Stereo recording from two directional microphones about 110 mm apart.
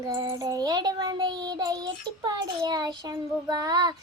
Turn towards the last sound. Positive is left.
turn(degrees=-35)  # may be behind; listen again after turning